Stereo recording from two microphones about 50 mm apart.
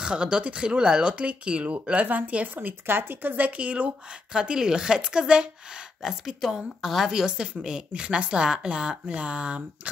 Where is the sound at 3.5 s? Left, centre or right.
Right; by 7.1 s centre.